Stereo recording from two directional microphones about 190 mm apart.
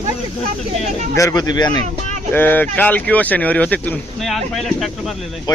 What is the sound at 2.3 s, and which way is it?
Speech, 10° left (ahead or behind).